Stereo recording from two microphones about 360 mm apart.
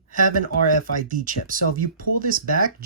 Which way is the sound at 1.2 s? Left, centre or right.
Right.